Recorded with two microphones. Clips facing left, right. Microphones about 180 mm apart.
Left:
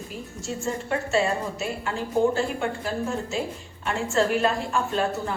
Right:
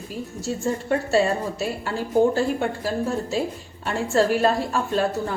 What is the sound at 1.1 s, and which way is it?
A woman's voice, 35° right (ahead or behind).